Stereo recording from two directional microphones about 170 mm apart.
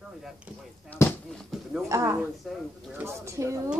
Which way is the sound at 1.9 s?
15° right (ahead or behind).